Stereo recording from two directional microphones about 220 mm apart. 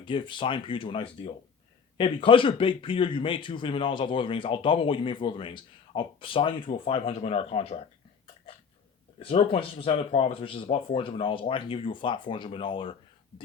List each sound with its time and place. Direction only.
0.0 s speech: 20° left (ahead or behind)
9.1 s speech: 25° left (ahead or behind)